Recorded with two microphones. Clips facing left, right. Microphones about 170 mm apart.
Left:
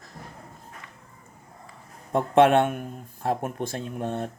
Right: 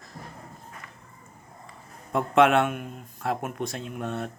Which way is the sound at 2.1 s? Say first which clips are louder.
Left 2 dB; 30° left (ahead or behind).